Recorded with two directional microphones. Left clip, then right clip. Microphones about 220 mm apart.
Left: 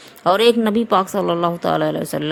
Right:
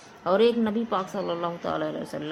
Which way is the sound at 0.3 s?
45° left (ahead or behind).